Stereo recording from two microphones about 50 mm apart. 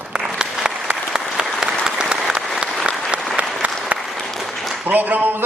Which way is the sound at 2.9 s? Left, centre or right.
Right.